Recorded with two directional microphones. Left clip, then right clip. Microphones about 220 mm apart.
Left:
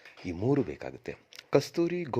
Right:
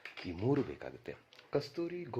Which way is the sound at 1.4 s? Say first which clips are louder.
Left 10 dB; 45° left (ahead or behind).